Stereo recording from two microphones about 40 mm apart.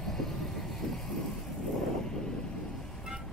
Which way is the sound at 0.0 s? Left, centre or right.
Centre.